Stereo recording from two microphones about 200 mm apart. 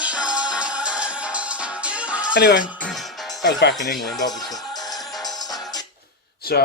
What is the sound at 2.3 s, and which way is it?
Speech, 55° left (ahead or behind).